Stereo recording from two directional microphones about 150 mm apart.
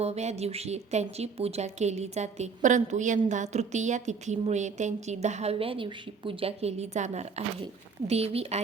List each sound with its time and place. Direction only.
0.0 s speech: 45° right (ahead or behind)